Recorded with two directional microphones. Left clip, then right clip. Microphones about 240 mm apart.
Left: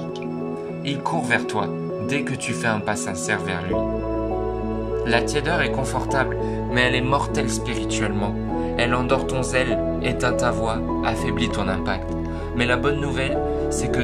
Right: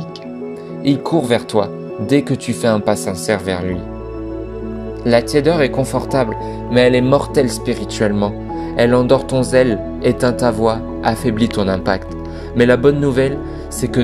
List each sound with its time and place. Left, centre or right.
0.8 s speech: centre
5.0 s speech: right